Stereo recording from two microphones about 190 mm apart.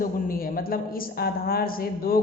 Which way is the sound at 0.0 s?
50° left (ahead or behind).